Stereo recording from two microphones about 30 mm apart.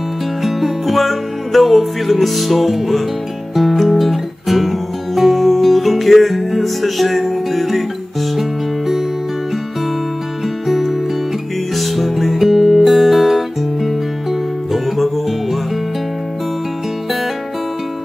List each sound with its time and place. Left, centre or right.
0.4 s music: centre
10.7 s music: centre